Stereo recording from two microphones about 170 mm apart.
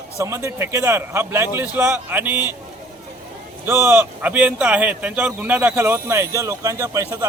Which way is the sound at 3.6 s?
15° right (ahead or behind).